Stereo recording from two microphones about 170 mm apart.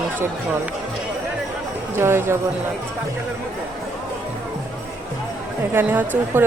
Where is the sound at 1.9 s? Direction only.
15° right (ahead or behind).